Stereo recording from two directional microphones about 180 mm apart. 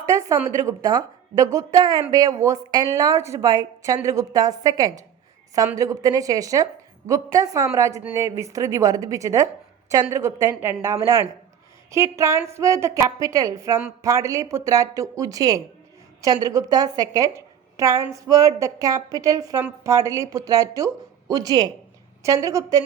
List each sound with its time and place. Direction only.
0.0 s a woman's voice: 15° right (ahead or behind)